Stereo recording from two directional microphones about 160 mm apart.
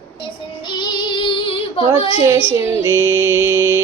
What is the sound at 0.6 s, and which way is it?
Child singing, 30° left (ahead or behind).